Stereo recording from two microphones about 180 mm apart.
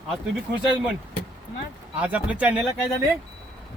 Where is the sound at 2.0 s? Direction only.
5° right (ahead or behind).